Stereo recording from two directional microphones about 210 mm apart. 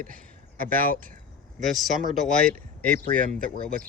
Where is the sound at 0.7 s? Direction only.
40° right (ahead or behind).